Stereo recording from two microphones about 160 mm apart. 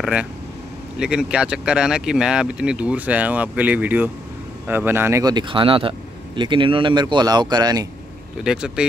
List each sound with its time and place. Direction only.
0.0 s a man's voice: 10° right (ahead or behind); by 7.9 s 25° right (ahead or behind)
8.5 s speech: 5° right (ahead or behind)